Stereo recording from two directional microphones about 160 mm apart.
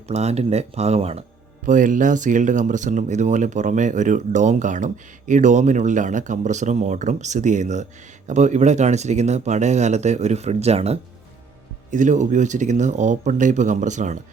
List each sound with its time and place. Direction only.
0.1 s speech: 40° right (ahead or behind)
1.6 s speech: 55° right (ahead or behind)